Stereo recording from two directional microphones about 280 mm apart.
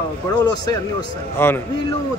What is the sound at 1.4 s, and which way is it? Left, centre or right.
Speech, centre.